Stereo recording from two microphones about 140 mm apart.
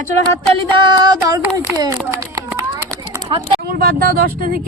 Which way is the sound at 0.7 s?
30° right (ahead or behind).